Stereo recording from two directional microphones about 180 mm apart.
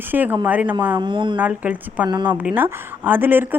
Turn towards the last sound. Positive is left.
turn(degrees=-10)  # may be behind; listen again after turning